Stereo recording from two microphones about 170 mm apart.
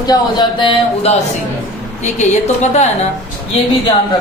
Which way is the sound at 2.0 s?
45° left (ahead or behind).